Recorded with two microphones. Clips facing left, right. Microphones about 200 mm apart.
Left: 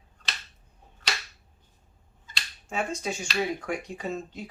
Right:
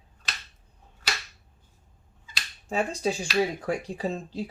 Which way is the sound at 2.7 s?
35° right (ahead or behind).